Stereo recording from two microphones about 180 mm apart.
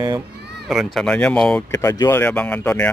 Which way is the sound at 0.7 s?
Centre (ahead or behind).